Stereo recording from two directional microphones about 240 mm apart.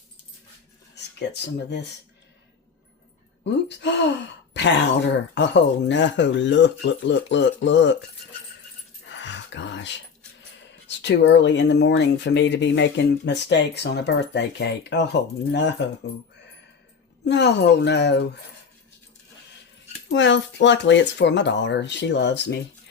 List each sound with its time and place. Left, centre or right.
0.9 s speech: left
3.4 s speech: left
9.0 s a sound: left
10.8 s speech: left
17.2 s speech: left
20.1 s speech: left